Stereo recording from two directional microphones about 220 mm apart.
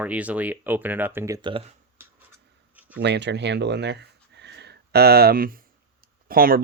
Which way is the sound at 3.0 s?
50° right (ahead or behind).